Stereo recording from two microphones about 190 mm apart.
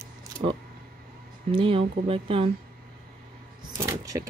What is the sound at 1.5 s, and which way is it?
Speech, 25° right (ahead or behind).